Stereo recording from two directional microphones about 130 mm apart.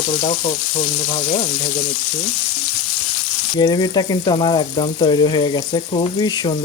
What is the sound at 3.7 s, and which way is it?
Speech, 30° left (ahead or behind).